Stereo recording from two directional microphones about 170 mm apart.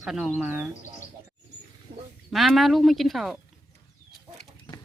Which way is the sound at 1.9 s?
35° right (ahead or behind).